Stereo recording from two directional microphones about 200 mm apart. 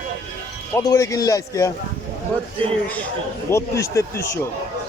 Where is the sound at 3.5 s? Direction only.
15° left (ahead or behind).